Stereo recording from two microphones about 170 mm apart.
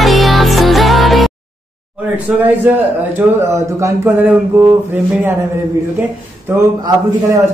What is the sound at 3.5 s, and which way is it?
Speech, 15° right (ahead or behind).